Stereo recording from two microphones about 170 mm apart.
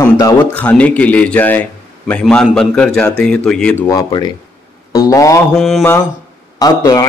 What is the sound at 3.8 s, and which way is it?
A man's voice, 25° left (ahead or behind).